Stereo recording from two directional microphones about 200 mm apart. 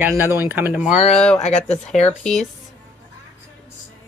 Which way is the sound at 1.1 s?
5° left (ahead or behind).